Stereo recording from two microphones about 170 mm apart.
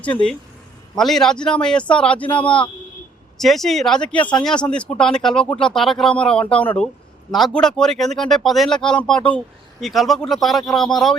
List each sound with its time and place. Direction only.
0.9 s speech: centre (ahead or behind)
2.2 s a man's voice: 30° left (ahead or behind)
3.3 s speech: centre (ahead or behind)